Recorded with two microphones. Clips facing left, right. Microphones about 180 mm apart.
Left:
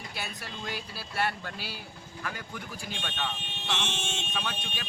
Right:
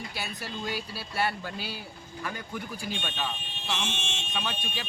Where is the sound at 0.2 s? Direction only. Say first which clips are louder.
Right 2 dB; centre (ahead or behind).